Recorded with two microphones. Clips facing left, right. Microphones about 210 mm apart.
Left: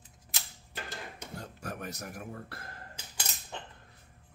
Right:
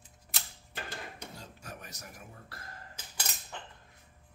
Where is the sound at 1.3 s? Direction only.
55° left (ahead or behind).